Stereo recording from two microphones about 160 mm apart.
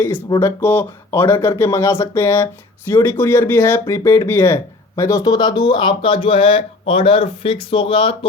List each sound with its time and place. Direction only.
0.3 s speech: 15° left (ahead or behind); by 8.3 s 35° left (ahead or behind)